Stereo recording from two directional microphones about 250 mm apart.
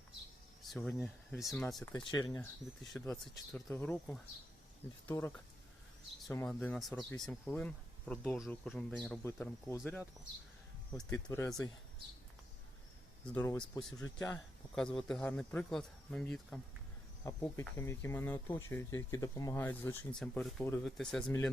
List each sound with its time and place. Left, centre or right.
0.6 s speech: centre
2.8 s speech: centre
6.3 s speech: centre
13.3 s speech: centre